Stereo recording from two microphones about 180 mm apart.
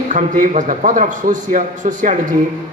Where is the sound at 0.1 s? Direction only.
45° right (ahead or behind).